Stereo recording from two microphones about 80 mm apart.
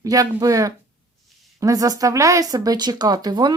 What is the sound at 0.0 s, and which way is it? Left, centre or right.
Speech, right.